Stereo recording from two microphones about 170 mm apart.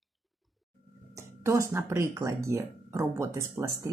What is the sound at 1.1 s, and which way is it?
Speech, 15° right (ahead or behind).